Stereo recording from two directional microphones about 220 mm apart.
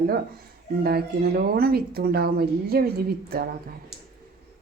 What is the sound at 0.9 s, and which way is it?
A woman's voice, 45° right (ahead or behind).